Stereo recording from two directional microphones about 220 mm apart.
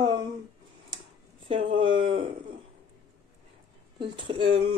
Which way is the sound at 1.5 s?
25° right (ahead or behind).